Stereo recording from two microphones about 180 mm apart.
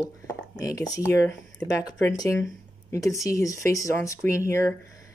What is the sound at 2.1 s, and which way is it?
Speech, 20° left (ahead or behind).